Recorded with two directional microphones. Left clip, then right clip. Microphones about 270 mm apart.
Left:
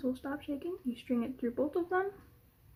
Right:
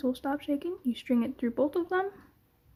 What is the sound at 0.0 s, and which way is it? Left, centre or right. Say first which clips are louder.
Speech: right 6 dB; right.